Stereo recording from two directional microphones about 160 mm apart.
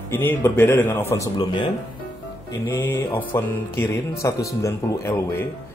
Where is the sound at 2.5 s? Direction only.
15° left (ahead or behind).